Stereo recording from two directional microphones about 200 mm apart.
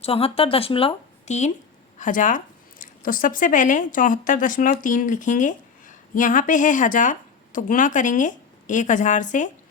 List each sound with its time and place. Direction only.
0.0 s a woman's voice: 30° left (ahead or behind)